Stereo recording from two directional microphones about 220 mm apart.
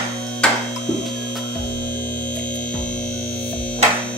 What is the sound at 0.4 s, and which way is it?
Hum, 5° left (ahead or behind).